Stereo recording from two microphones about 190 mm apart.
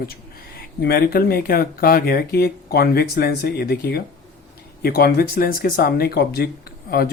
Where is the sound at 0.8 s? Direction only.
55° left (ahead or behind).